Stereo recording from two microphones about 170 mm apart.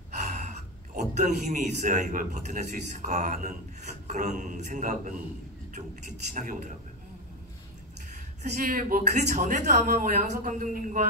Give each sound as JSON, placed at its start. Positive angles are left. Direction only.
{"t": 0.2, "sound": "speech", "side_deg": -45}
{"t": 8.4, "sound": "speech", "side_deg": -55}